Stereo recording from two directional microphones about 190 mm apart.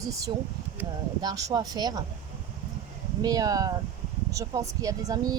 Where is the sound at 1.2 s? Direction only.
20° right (ahead or behind).